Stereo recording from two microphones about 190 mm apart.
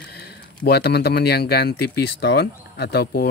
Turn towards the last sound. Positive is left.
turn(degrees=55)  # may be behind; listen again after turning